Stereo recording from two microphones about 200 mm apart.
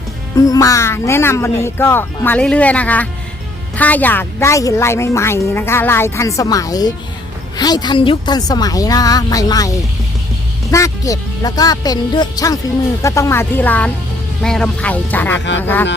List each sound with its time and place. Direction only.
0.3 s a woman's voice: 15° left (ahead or behind)